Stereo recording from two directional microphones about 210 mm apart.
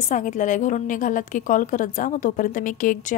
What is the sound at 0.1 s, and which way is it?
A woman's voice, 35° left (ahead or behind).